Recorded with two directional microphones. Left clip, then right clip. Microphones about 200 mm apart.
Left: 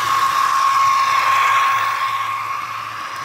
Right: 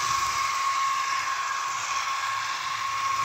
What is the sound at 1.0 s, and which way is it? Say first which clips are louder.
Ratchet: left 12 dB; 60° left (ahead or behind).